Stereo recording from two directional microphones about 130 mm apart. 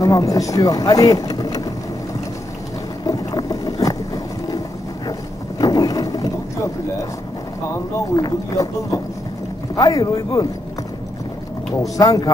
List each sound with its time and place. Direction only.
0.0 s speech: 25° left (ahead or behind)
3.1 s boat: 30° left (ahead or behind)
5.6 s boat: 30° left (ahead or behind)
8.2 s speech: 25° left (ahead or behind)
12.0 s speech: 30° left (ahead or behind)